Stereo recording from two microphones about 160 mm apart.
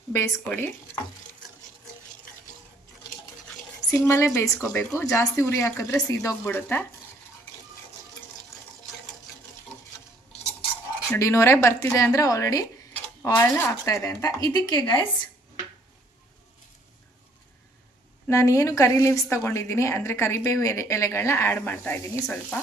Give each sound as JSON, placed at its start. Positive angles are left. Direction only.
{"t": 0.1, "sound": "a woman's voice", "side_deg": 15}
{"t": 3.9, "sound": "a woman's voice", "side_deg": 15}
{"t": 11.1, "sound": "a woman's voice", "side_deg": 15}
{"t": 18.3, "sound": "a woman's voice", "side_deg": 20}